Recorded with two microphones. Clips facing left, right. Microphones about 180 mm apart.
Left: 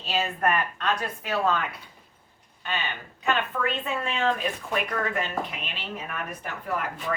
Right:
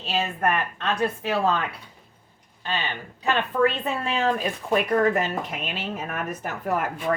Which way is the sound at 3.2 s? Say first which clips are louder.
Right 5 dB; 35° right (ahead or behind).